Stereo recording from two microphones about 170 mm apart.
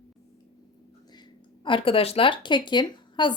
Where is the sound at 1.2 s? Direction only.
30° left (ahead or behind).